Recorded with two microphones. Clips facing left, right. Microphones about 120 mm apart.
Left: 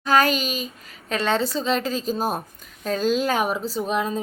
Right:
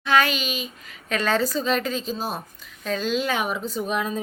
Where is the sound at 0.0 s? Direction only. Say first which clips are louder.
Left 2 dB; 40° left (ahead or behind).